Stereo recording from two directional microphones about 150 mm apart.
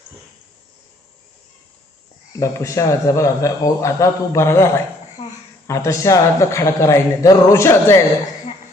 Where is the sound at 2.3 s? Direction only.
20° left (ahead or behind).